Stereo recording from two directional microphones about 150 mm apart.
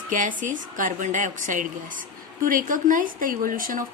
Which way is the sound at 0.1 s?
60° right (ahead or behind).